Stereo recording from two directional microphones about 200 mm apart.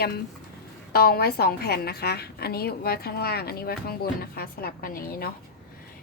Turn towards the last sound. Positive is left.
turn(degrees=50)  # may be behind; listen again after turning